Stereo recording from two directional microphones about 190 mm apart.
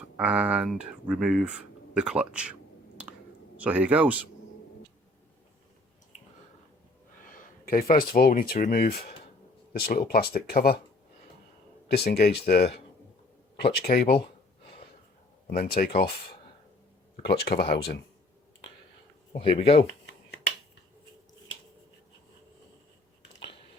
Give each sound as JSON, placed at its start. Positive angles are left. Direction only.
{"t": 0.2, "sound": "speech", "side_deg": -5}
{"t": 3.6, "sound": "speech", "side_deg": -10}
{"t": 6.1, "sound": "a sound", "side_deg": 35}
{"t": 7.6, "sound": "speech", "side_deg": 50}
{"t": 11.9, "sound": "speech", "side_deg": 55}
{"t": 15.4, "sound": "speech", "side_deg": 50}
{"t": 17.2, "sound": "speech", "side_deg": 55}
{"t": 19.4, "sound": "speech", "side_deg": 30}